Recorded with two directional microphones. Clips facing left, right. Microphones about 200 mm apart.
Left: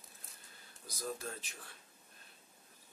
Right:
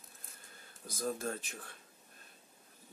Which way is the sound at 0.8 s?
50° right (ahead or behind).